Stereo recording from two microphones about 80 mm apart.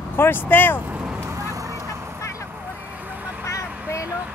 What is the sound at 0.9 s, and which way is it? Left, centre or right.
Vehicle, centre.